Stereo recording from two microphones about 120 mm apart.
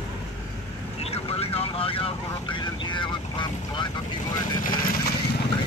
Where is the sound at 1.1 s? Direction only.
55° left (ahead or behind).